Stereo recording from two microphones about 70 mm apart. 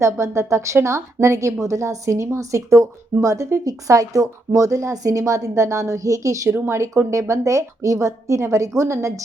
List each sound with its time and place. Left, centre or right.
0.0 s speech: right